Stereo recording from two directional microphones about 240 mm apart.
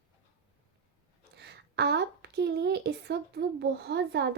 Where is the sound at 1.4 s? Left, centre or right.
Right.